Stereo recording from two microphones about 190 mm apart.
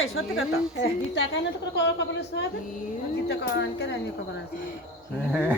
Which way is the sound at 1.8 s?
70° left (ahead or behind).